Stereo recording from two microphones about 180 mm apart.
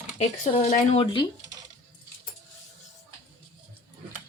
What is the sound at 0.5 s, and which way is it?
Speech, 40° left (ahead or behind).